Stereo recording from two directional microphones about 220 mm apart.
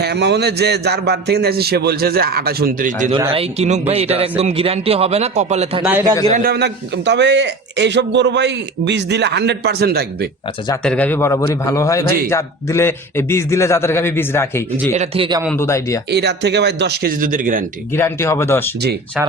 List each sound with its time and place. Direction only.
0.0 s a man's voice: 50° right (ahead or behind)
3.1 s a man's voice: 25° right (ahead or behind)
5.8 s a man's voice: 10° right (ahead or behind)
6.3 s a man's voice: 45° right (ahead or behind)
10.8 s a man's voice: 5° left (ahead or behind)
14.9 s a man's voice: 30° right (ahead or behind)
15.4 s a man's voice: 10° left (ahead or behind)
16.0 s a man's voice: 50° right (ahead or behind)
17.9 s a man's voice: 10° left (ahead or behind)